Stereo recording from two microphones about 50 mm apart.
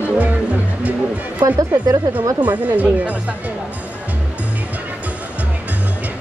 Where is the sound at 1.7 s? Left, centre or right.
Right.